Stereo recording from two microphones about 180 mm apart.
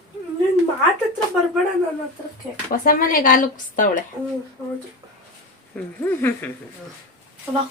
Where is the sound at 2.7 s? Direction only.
50° left (ahead or behind).